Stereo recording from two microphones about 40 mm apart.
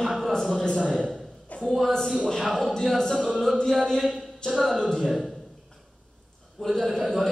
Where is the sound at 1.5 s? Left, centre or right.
Left.